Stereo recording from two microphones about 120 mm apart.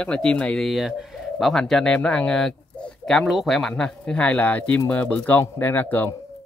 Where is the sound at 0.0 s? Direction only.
10° left (ahead or behind).